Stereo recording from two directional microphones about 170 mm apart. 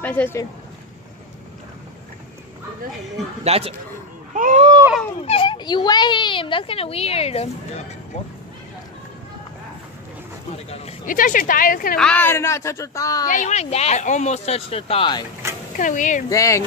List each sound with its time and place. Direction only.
0.0 s speech: 10° left (ahead or behind)
3.4 s speech: 35° right (ahead or behind)
4.3 s speech: 50° right (ahead or behind)
5.2 s speech: 30° left (ahead or behind)
11.1 s a woman's voice: 55° left (ahead or behind)
12.0 s speech: 10° left (ahead or behind)
13.3 s speech: 45° left (ahead or behind); by 15.2 s 30° left (ahead or behind)
15.4 s a sound: 15° right (ahead or behind)
15.8 s speech: 50° left (ahead or behind)
16.3 s speech: 20° left (ahead or behind)